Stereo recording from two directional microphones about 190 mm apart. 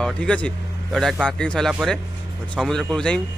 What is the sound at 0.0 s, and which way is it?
A man's voice, 5° left (ahead or behind).